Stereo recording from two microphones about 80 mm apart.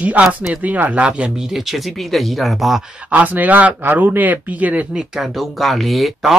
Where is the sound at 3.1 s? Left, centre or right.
Centre.